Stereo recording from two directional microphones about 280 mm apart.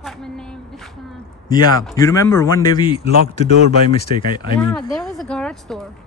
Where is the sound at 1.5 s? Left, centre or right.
Centre.